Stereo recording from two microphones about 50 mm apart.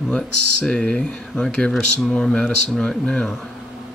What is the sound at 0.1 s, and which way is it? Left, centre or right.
Speech, centre.